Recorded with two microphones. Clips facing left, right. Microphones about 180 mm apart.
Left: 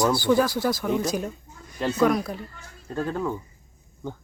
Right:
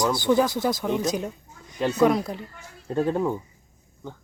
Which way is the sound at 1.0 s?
20° right (ahead or behind).